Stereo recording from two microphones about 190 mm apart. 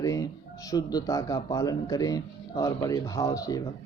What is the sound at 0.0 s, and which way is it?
Speech, 15° left (ahead or behind).